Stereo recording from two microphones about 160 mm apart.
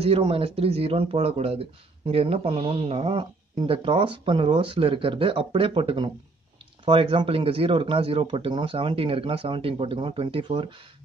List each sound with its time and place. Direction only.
0.0 s speech: 35° right (ahead or behind)